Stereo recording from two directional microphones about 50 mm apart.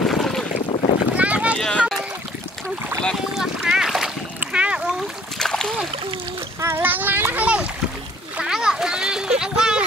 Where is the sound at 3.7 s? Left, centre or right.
Centre.